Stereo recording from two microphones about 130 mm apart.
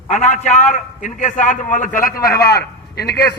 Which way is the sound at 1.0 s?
70° left (ahead or behind).